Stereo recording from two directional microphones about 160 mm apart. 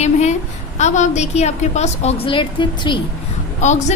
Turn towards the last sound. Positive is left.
turn(degrees=50)  # may be behind; listen again after turning